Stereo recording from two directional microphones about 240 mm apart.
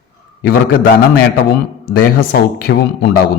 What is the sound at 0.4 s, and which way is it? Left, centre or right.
Speech, left.